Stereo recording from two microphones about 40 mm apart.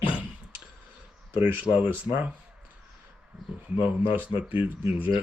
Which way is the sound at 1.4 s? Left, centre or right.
Right.